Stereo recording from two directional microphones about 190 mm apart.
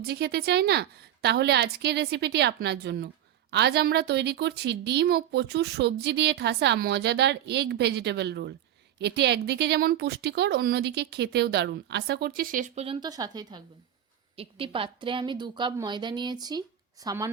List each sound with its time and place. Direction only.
0.0 s a woman's voice: 60° right (ahead or behind); by 17.2 s 20° right (ahead or behind)